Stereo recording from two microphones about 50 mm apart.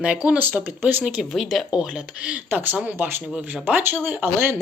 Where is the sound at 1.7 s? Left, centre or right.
Centre.